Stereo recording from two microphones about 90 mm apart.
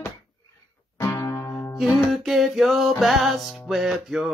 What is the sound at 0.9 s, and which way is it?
Music, 35° left (ahead or behind).